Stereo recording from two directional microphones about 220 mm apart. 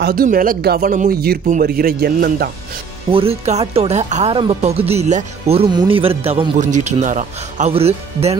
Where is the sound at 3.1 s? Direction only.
25° right (ahead or behind).